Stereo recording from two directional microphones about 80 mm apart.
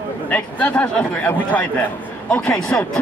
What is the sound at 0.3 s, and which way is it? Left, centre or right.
A man's voice, centre.